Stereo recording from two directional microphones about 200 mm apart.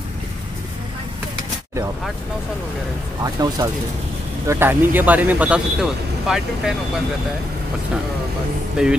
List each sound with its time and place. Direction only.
3.3 s speech: 20° right (ahead or behind); by 6.7 s 5° right (ahead or behind)
8.8 s speech: 5° right (ahead or behind)